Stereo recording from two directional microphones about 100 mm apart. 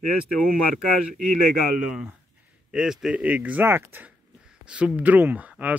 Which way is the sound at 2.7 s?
5° right (ahead or behind).